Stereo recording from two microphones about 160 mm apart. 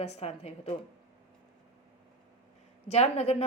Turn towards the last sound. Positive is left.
turn(degrees=40)  # may be behind; listen again after turning